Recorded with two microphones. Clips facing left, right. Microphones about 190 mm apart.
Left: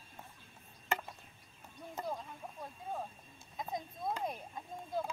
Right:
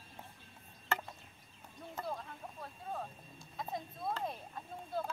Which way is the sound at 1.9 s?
15° left (ahead or behind).